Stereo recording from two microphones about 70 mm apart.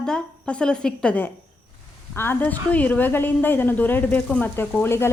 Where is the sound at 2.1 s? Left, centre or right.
Left.